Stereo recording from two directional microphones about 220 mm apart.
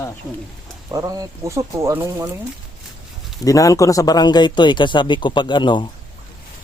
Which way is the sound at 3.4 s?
15° left (ahead or behind).